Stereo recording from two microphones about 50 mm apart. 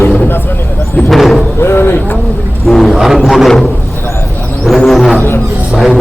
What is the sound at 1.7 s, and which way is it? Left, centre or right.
Speech, left.